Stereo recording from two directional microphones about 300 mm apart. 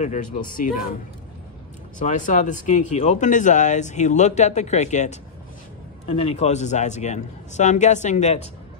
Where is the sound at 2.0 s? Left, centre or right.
Left.